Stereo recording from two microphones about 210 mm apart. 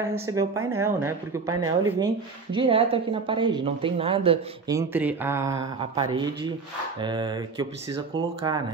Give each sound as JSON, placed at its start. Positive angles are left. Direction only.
{"t": 0.0, "sound": "a woman's voice", "side_deg": -15}
{"t": 4.7, "sound": "a woman's voice", "side_deg": -10}